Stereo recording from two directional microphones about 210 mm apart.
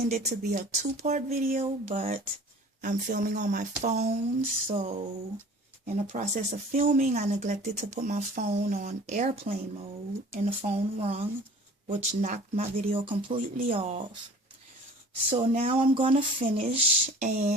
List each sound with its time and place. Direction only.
0.1 s speech: 30° right (ahead or behind)
15.3 s speech: 30° right (ahead or behind)